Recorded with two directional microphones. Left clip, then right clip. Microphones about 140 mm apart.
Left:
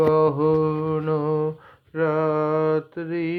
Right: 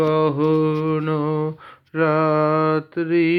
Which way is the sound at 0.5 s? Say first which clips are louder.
Right 2 dB; 25° right (ahead or behind).